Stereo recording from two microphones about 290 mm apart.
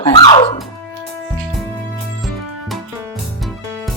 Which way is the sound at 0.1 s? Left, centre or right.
Centre.